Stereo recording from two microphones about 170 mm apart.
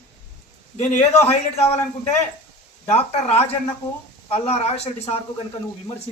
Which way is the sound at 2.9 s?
40° left (ahead or behind).